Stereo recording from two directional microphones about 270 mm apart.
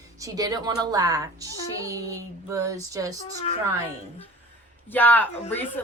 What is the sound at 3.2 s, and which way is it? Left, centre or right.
Speech, left.